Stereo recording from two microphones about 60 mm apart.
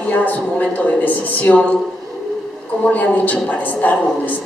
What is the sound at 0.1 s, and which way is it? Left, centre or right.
A man's voice, left.